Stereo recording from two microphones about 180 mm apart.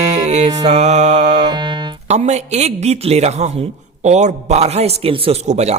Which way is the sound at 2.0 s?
40° right (ahead or behind).